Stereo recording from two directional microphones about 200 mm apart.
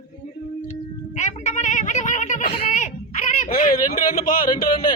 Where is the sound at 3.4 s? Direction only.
45° left (ahead or behind).